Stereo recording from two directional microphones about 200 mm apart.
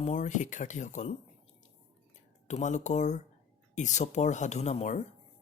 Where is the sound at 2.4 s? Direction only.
35° left (ahead or behind).